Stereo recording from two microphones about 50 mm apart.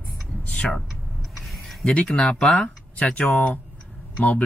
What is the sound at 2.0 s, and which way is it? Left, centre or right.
Speech, centre.